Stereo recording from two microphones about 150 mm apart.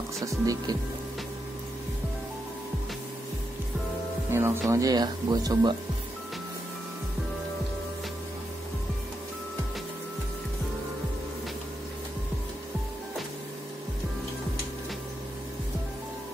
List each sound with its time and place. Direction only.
0.2 s speech: 20° right (ahead or behind)
4.3 s speech: 15° right (ahead or behind)